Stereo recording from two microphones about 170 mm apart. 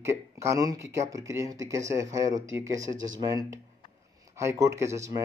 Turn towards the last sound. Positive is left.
turn(degrees=-15)  # may be behind; listen again after turning